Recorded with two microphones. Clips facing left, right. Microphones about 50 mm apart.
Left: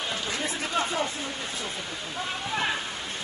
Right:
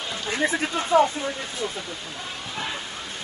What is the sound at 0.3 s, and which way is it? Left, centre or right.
Speech, right.